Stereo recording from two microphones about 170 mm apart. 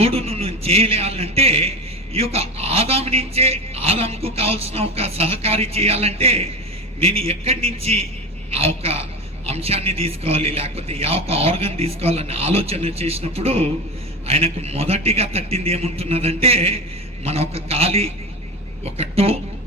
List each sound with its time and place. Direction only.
0.0 s a man's voice: 35° right (ahead or behind)